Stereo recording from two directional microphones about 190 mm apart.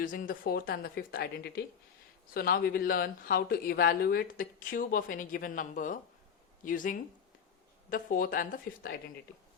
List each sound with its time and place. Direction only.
0.0 s speech: 45° left (ahead or behind)